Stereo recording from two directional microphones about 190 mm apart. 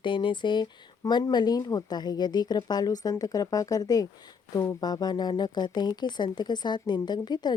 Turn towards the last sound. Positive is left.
turn(degrees=20)  # may be behind; listen again after turning